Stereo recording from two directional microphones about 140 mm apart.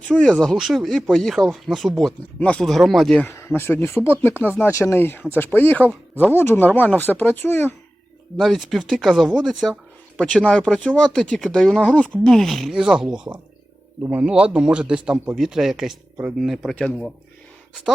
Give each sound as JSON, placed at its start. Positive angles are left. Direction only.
{"t": 0.1, "sound": "speech", "side_deg": 5}
{"t": 3.2, "sound": "speech", "side_deg": 20}
{"t": 8.4, "sound": "a man's voice", "side_deg": 0}